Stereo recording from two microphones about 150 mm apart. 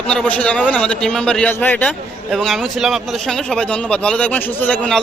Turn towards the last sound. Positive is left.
turn(degrees=5)  # may be behind; listen again after turning